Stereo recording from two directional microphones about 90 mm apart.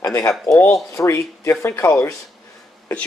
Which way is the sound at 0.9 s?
30° left (ahead or behind).